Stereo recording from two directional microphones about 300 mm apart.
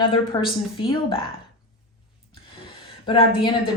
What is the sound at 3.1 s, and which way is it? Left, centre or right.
Speech, centre.